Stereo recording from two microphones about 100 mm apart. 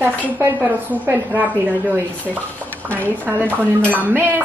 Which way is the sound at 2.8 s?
15° left (ahead or behind).